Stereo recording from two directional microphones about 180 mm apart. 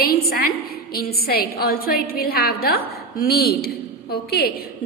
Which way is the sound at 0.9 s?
60° left (ahead or behind).